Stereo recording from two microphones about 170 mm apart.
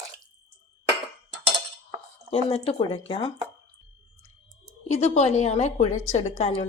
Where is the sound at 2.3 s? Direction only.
35° left (ahead or behind).